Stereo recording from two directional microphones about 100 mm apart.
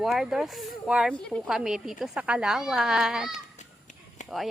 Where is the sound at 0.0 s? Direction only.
5° right (ahead or behind).